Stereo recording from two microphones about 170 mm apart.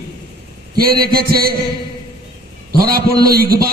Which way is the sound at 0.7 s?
65° right (ahead or behind).